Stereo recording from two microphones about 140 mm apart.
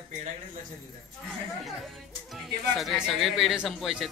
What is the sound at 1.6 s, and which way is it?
Music, centre (ahead or behind).